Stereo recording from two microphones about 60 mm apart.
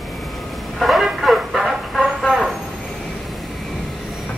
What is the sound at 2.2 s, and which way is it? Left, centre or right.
Vehicle, centre.